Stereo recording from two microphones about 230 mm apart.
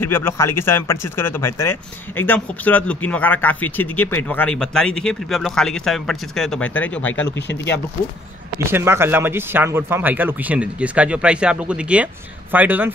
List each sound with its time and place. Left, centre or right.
0.0 s speech: centre
7.3 s speech: left
8.5 s speech: centre